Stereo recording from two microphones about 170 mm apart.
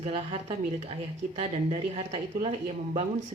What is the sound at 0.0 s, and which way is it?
Speech, 40° right (ahead or behind).